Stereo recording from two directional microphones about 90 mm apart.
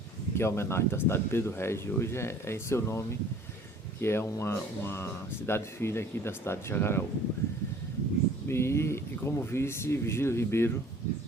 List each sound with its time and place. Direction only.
0.3 s speech: 30° left (ahead or behind)
8.4 s speech: 30° left (ahead or behind)